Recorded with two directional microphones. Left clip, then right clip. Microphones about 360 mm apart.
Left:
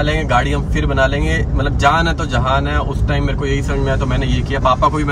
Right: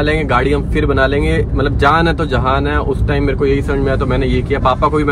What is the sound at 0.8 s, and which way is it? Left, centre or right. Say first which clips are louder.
Speech: right 2 dB; right.